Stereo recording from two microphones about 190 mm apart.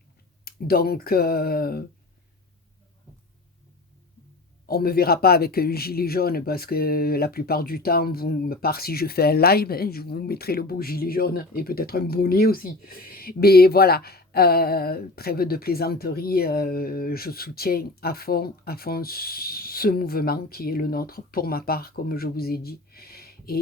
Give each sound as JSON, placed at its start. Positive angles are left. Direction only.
{"t": 0.4, "sound": "speech", "side_deg": 55}
{"t": 4.7, "sound": "speech", "side_deg": 55}